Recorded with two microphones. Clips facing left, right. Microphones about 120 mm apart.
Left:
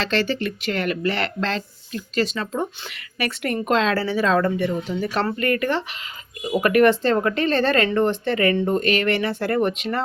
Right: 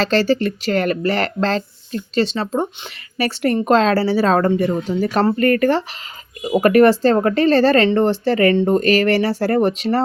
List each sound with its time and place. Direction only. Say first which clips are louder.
0.0 s speech: right 6 dB; 40° right (ahead or behind)